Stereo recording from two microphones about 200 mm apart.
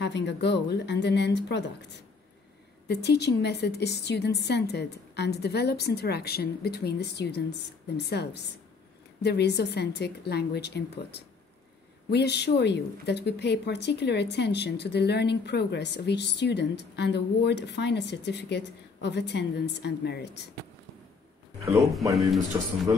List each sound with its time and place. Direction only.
0.0 s a woman's voice: 60° left (ahead or behind)
2.9 s a woman's voice: 55° left (ahead or behind)
21.6 s speech: centre (ahead or behind)